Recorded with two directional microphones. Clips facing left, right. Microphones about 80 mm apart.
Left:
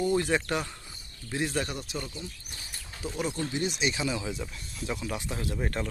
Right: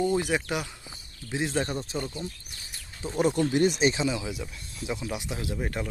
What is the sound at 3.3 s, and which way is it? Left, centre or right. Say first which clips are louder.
Speech: right 8 dB; right.